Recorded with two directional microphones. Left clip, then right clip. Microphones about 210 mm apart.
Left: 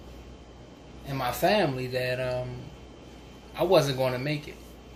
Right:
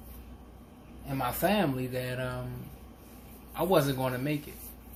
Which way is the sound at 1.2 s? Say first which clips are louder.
Left 4 dB; 40° right (ahead or behind).